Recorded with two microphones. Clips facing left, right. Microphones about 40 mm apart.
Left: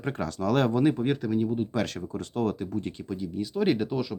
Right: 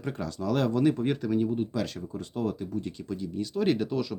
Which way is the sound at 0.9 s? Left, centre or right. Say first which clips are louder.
Left 1 dB; centre.